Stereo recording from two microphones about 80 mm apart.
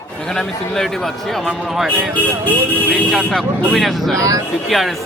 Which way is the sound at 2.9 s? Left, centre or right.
Centre.